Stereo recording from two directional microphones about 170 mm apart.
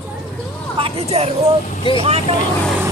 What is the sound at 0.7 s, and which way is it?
Vehicle, 35° right (ahead or behind).